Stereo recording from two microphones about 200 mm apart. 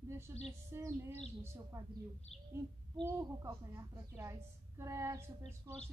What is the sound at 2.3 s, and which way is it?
Bird, 30° left (ahead or behind).